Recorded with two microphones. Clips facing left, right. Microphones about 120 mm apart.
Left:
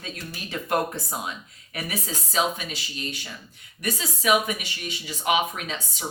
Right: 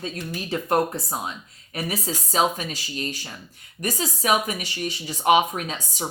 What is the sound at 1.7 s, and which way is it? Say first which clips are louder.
Speech: right 4 dB; 35° right (ahead or behind).